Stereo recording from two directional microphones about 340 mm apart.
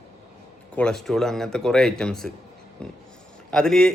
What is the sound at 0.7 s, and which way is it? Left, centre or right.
Speech, centre.